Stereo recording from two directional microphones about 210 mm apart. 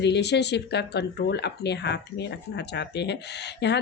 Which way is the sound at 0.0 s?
55° left (ahead or behind).